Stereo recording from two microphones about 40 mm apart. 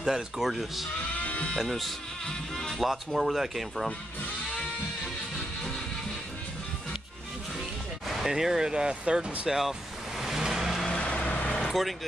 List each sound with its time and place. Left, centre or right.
0.0 s a man's voice: centre
1.1 s music: left
1.7 s speech: centre
8.3 s a man's voice: centre
9.0 s speech: right
9.5 s a man's voice: centre
10.2 s vehicle: centre
10.9 s vehicle: left
11.5 s vehicle: centre